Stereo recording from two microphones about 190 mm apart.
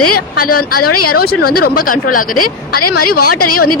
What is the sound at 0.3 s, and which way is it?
Speech, 50° left (ahead or behind).